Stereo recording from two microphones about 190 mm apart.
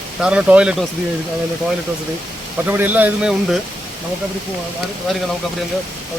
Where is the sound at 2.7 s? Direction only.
10° right (ahead or behind).